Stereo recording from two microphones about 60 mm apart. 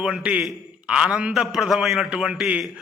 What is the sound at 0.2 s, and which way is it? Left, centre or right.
A man's voice, centre.